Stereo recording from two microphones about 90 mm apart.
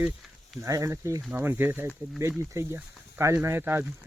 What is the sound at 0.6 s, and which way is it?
Speech, 35° right (ahead or behind).